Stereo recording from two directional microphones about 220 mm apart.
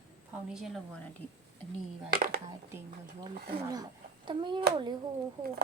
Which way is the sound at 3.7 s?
20° right (ahead or behind).